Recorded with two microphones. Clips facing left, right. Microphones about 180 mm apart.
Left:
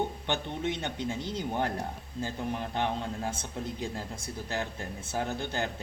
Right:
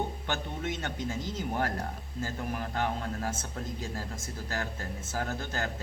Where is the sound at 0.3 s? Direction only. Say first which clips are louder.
Left 2 dB; 30° left (ahead or behind).